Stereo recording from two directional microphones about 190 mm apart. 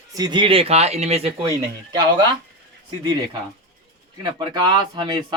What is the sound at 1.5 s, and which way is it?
Speech, 20° right (ahead or behind).